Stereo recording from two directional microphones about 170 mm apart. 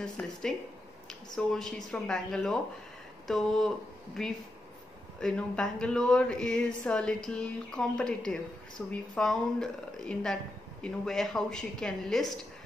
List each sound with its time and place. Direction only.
0.0 s a woman's voice: 5° left (ahead or behind)